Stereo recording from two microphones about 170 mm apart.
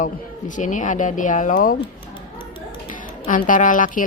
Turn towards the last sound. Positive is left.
turn(degrees=50)  # may be behind; listen again after turning